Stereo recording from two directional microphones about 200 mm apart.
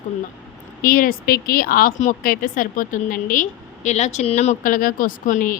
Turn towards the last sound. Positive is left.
turn(degrees=40)  # may be behind; listen again after turning